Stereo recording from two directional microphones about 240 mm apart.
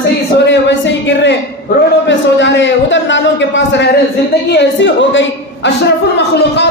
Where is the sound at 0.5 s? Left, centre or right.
Left.